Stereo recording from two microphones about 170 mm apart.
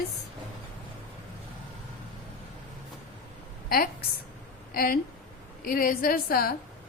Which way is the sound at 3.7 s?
60° left (ahead or behind).